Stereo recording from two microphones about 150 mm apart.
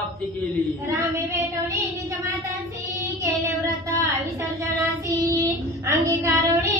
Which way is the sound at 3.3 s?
20° right (ahead or behind).